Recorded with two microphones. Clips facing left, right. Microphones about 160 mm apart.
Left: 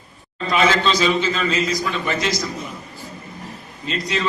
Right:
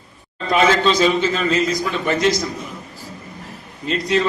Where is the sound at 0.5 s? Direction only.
50° right (ahead or behind).